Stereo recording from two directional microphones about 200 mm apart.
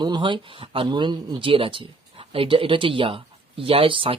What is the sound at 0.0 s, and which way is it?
Speech, 25° right (ahead or behind).